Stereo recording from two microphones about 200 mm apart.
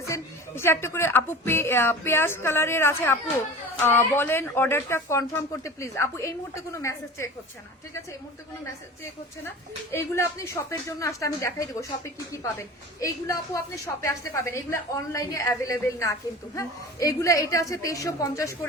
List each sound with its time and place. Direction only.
0.0 s a woman's voice: 15° left (ahead or behind)
9.9 s a woman's voice: 15° left (ahead or behind)